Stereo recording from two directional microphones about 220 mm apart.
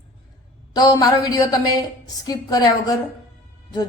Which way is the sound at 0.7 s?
15° left (ahead or behind).